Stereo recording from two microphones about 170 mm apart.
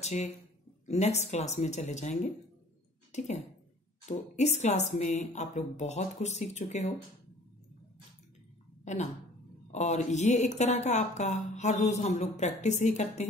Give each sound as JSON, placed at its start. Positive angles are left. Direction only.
{"t": 0.0, "sound": "speech", "side_deg": 40}
{"t": 8.8, "sound": "a woman's voice", "side_deg": 45}